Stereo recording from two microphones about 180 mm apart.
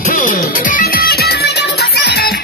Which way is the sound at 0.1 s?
45° left (ahead or behind).